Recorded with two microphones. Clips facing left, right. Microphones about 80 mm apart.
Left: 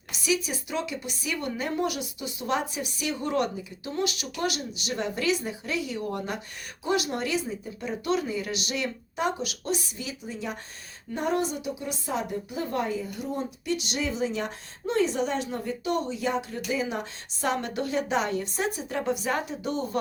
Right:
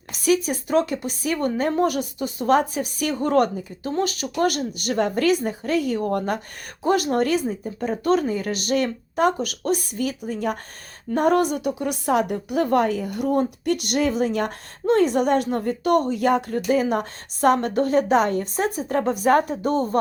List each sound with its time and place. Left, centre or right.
0.1 s a woman's voice: right